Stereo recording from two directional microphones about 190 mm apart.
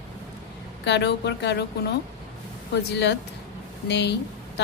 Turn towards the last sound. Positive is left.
turn(degrees=65)  # may be behind; listen again after turning